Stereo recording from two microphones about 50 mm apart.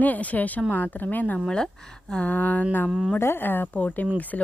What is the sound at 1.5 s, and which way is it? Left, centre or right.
Speech, centre.